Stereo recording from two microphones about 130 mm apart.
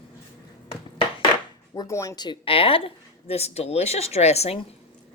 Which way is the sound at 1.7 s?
25° left (ahead or behind).